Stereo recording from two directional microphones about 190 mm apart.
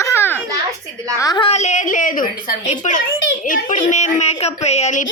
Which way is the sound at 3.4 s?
45° left (ahead or behind).